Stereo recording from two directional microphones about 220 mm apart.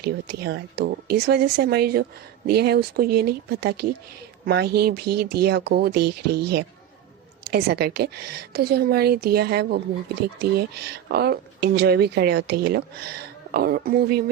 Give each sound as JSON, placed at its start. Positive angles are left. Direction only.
{"t": 0.0, "sound": "a woman's voice", "side_deg": -45}